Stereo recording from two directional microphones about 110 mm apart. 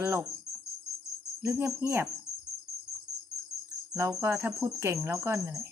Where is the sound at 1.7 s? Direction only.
25° right (ahead or behind).